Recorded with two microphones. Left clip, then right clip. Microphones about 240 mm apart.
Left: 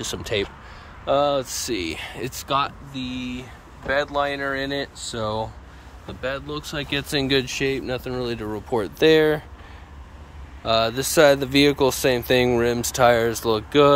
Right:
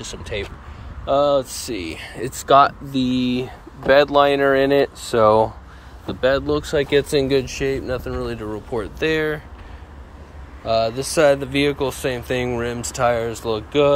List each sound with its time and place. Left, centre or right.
0.0 s speech: left
1.0 s speech: centre
2.4 s speech: centre
3.9 s speech: right
6.0 s speech: right
6.6 s speech: centre; by 9.4 s left
10.6 s speech: centre